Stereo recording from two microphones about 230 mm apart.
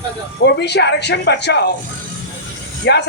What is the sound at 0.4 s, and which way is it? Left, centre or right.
A woman's voice, left.